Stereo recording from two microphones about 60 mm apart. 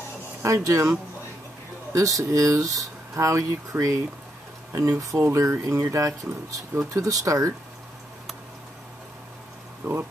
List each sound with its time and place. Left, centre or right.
0.4 s speech: right
5.3 s speech: right
9.8 s speech: right